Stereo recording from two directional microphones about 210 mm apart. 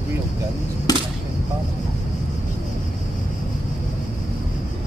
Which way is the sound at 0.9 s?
20° left (ahead or behind).